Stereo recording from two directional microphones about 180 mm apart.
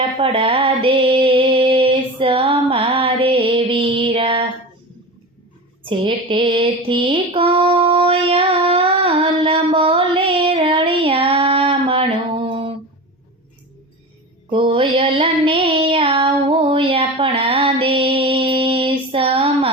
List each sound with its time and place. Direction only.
0.2 s mantra: 30° right (ahead or behind)
5.8 s mantra: 30° right (ahead or behind)
14.5 s child singing: 30° right (ahead or behind)